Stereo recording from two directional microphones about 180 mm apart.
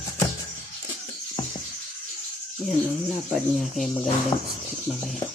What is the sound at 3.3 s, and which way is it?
Speech, centre (ahead or behind).